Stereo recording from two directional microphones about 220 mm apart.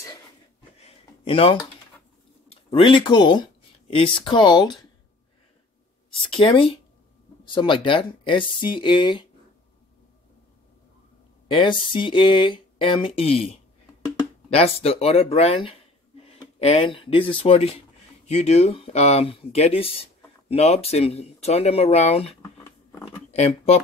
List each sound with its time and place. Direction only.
0.8 s a sound: 25° left (ahead or behind)
2.5 s speech: 25° left (ahead or behind)
6.1 s speech: 25° left (ahead or behind)
11.4 s speech: 20° left (ahead or behind)
22.4 s a sound: 10° left (ahead or behind)
23.3 s speech: 30° left (ahead or behind)